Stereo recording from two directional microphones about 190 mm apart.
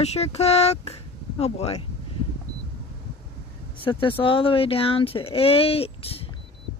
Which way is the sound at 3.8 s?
25° left (ahead or behind).